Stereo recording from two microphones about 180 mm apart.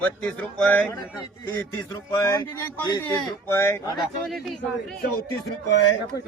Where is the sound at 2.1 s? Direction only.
15° left (ahead or behind).